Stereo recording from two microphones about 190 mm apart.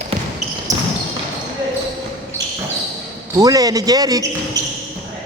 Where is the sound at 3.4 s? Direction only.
20° right (ahead or behind).